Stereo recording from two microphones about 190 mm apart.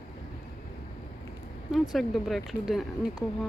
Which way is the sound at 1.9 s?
Centre (ahead or behind).